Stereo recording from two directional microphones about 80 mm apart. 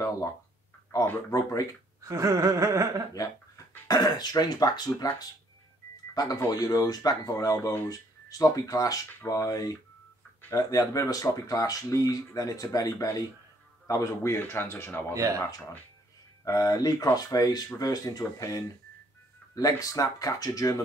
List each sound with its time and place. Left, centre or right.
0.9 s speech: left
2.0 s gasp: right
3.2 s speech: left
16.4 s speech: left